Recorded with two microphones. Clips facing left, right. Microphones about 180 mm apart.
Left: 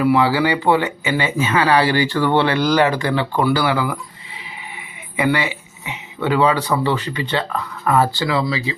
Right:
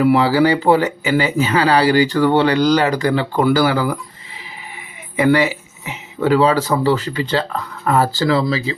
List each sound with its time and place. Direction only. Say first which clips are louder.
0.2 s speech: right 3 dB; 40° right (ahead or behind)
5.1 s speech: right 5 dB; 40° right (ahead or behind)